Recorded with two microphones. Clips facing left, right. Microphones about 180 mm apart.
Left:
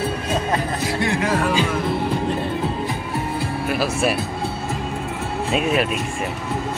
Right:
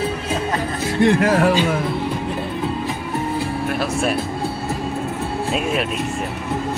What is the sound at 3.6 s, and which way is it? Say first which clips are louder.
Speech: left 2 dB; 5° left (ahead or behind).